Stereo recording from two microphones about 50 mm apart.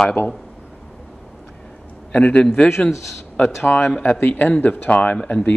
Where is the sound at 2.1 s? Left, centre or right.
Left.